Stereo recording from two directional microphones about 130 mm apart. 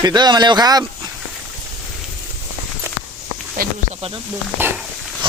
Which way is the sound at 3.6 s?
90° right.